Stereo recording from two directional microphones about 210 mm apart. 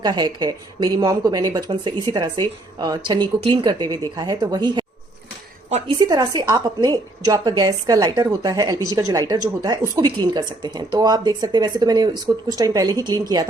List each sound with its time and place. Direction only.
0.0 s speech: 20° right (ahead or behind)
6.0 s speech: 20° right (ahead or behind)